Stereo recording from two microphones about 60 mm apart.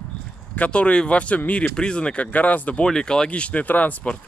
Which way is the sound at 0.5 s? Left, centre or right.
Left.